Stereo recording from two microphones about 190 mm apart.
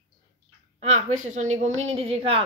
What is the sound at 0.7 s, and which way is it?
A woman's voice, 40° right (ahead or behind).